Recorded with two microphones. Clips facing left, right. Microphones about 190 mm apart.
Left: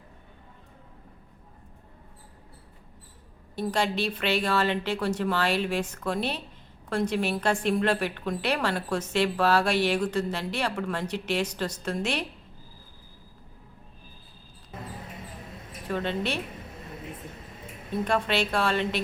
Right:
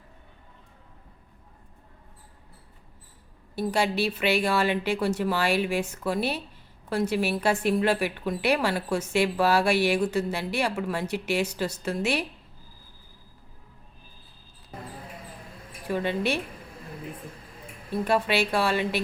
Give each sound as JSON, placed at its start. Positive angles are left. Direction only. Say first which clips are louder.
{"t": 3.5, "sound": "a woman's voice", "louder": "right 2 dB", "side_deg": -10}
{"t": 14.7, "sound": "basketball bounce", "louder": "even", "side_deg": 25}
{"t": 15.9, "sound": "a woman's voice", "louder": "right 2 dB", "side_deg": -10}
{"t": 18.0, "sound": "a woman's voice", "louder": "right 2 dB", "side_deg": -10}